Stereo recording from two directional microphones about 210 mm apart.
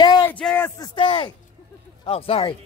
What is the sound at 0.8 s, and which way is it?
A man's voice, 25° left (ahead or behind).